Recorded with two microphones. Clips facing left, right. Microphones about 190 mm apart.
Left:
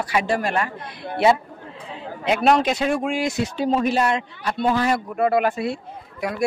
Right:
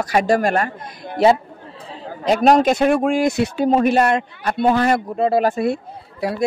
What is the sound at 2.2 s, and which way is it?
A man's voice, 40° right (ahead or behind).